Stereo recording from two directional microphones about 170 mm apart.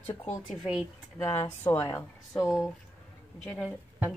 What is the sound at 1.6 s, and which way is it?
Speech, 15° left (ahead or behind).